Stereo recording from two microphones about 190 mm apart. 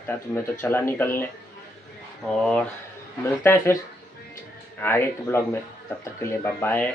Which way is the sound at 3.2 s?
15° left (ahead or behind).